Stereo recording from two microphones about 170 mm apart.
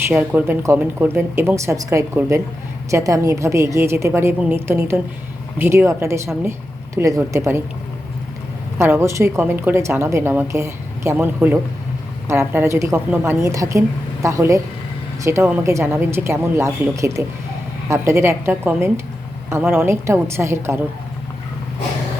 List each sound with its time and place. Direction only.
0.1 s a woman's voice: 10° right (ahead or behind)
8.8 s a woman's voice: 15° right (ahead or behind)